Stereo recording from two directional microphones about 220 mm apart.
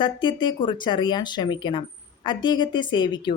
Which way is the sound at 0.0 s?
20° left (ahead or behind).